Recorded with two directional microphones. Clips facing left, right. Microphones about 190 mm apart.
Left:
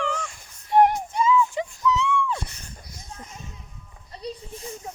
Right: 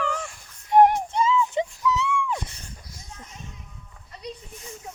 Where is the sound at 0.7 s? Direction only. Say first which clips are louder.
Right 2 dB; 15° right (ahead or behind).